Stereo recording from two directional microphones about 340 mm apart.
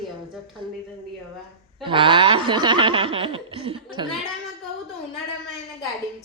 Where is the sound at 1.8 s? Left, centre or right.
Centre.